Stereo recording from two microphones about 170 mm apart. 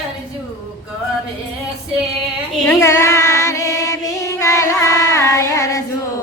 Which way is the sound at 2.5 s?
10° left (ahead or behind).